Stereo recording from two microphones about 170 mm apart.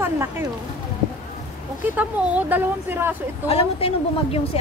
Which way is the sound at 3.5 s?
35° left (ahead or behind).